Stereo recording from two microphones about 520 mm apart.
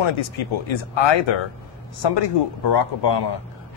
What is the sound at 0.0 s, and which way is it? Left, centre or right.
Speech, left.